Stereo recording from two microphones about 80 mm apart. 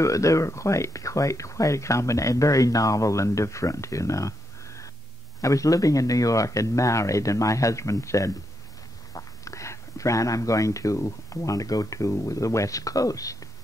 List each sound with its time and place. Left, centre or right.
0.0 s speech: left